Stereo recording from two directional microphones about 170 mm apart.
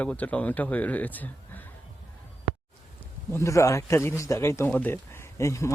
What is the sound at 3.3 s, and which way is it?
Speech, 15° left (ahead or behind).